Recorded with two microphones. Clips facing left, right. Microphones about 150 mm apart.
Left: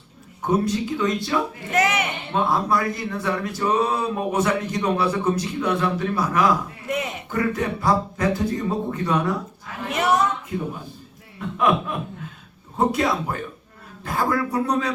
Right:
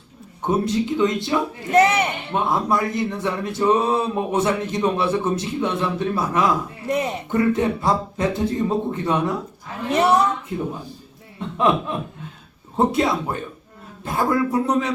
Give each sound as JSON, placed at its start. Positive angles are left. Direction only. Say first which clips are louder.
{"t": 0.4, "sound": "speech", "louder": "right 1 dB", "side_deg": -25}
{"t": 2.3, "sound": "a woman's voice", "louder": "left 1 dB", "side_deg": -20}
{"t": 11.3, "sound": "a sound", "louder": "right 1 dB", "side_deg": -25}
{"t": 12.7, "sound": "speech", "louder": "right 2 dB", "side_deg": -25}